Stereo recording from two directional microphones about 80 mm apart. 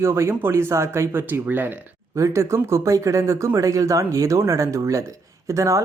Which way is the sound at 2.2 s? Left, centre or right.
Right.